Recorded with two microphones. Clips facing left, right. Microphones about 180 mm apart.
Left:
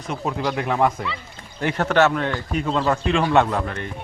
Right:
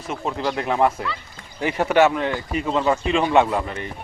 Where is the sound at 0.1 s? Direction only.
Centre (ahead or behind).